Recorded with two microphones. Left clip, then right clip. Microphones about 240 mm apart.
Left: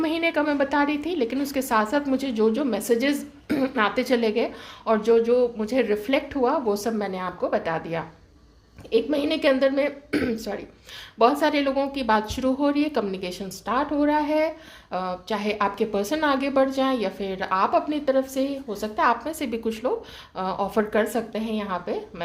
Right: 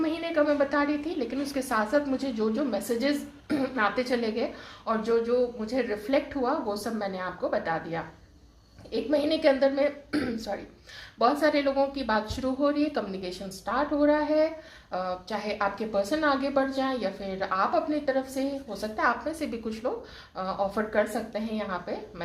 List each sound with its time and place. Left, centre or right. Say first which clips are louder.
0.0 s a woman's voice: left 3 dB; left